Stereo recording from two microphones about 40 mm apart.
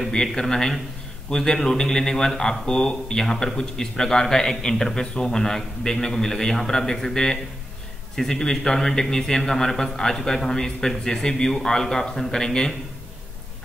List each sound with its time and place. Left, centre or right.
0.1 s a man's voice: centre